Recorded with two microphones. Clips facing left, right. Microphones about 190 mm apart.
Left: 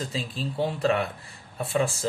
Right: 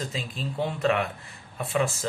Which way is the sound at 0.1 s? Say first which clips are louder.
Left 2 dB; 35° left (ahead or behind).